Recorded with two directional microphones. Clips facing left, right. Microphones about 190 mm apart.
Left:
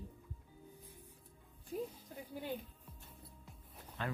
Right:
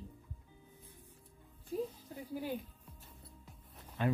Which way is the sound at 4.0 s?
15° right (ahead or behind).